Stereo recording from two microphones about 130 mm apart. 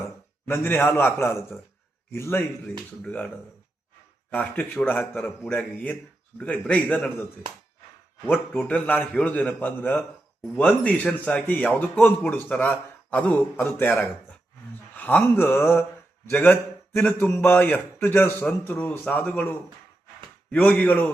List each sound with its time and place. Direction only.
0.4 s a man's voice: 15° left (ahead or behind)
8.3 s a man's voice: 10° left (ahead or behind)
14.9 s a man's voice: 15° left (ahead or behind)